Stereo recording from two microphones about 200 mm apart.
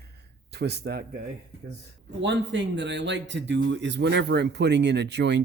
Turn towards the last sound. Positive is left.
turn(degrees=-60)  # may be behind; listen again after turning